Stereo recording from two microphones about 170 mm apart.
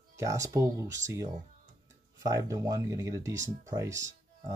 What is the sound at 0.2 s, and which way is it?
Speech, 20° right (ahead or behind).